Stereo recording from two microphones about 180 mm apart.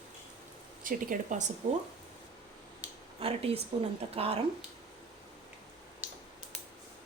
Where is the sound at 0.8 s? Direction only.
50° right (ahead or behind).